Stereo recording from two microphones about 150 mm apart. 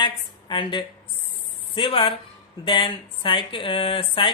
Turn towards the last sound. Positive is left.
turn(degrees=35)  # may be behind; listen again after turning